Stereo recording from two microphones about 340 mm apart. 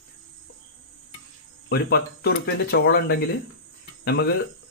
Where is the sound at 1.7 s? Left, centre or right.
Left.